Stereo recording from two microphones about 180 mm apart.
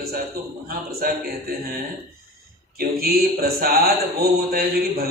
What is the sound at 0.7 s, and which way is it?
Speech, 55° right (ahead or behind).